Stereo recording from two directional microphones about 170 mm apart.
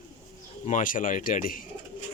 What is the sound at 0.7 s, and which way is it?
Speech, 50° left (ahead or behind).